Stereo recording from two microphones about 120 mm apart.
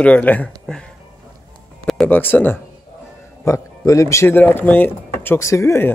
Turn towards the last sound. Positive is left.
turn(degrees=20)  # may be behind; listen again after turning